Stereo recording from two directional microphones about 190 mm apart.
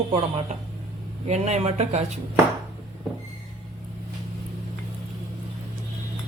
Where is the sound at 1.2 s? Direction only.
35° right (ahead or behind).